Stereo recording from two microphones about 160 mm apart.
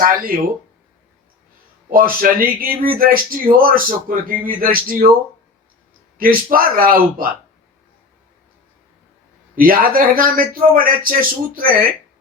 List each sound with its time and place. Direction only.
0.0 s speech: 65° right (ahead or behind)
1.9 s speech: 65° right (ahead or behind)
6.1 s speech: 60° right (ahead or behind)
9.6 s speech: 65° right (ahead or behind)